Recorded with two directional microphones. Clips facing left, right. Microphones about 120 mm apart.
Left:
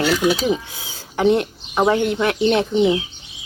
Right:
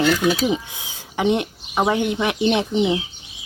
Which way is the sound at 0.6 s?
20° right (ahead or behind).